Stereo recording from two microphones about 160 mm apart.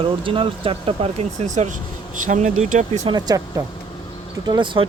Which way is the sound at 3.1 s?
25° right (ahead or behind).